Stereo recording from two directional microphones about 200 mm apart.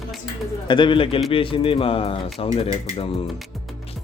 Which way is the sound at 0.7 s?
25° left (ahead or behind).